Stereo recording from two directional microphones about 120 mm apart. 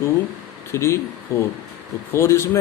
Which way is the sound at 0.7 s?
25° left (ahead or behind).